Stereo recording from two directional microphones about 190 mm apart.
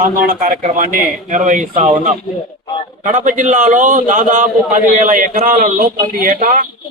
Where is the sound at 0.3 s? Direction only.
45° right (ahead or behind).